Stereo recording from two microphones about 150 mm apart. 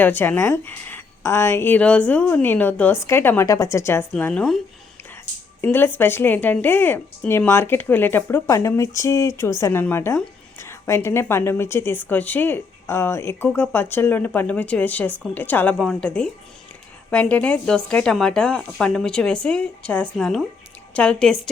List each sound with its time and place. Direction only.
0.0 s speech: 15° left (ahead or behind)
5.6 s a woman's voice: 15° left (ahead or behind)